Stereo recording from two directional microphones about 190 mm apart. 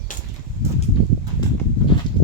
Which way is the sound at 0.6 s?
15° right (ahead or behind).